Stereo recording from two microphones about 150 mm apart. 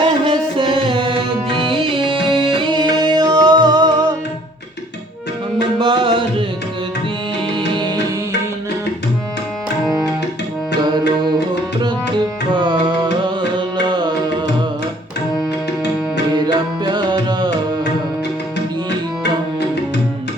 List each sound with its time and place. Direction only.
0.0 s music: 35° right (ahead or behind)
5.8 s music: 35° right (ahead or behind)
7.5 s music: 30° right (ahead or behind)
10.8 s tabla: 30° right (ahead or behind)
12.5 s music: 30° right (ahead or behind)
16.3 s tabla: 30° right (ahead or behind)